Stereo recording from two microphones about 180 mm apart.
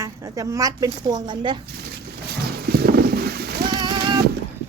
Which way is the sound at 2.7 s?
60° right (ahead or behind).